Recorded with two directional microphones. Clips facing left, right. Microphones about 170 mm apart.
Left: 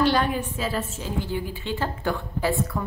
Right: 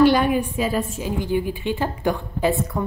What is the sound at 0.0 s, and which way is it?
A woman's voice, 15° right (ahead or behind).